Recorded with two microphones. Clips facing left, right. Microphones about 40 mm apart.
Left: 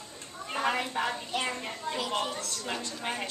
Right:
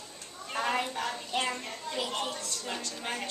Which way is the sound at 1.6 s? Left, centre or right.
Centre.